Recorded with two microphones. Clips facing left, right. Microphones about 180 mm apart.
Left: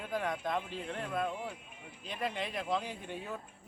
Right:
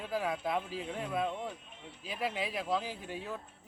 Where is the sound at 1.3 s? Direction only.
10° left (ahead or behind).